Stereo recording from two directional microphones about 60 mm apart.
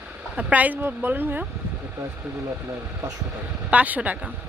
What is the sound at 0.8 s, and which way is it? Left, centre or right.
Speech, right.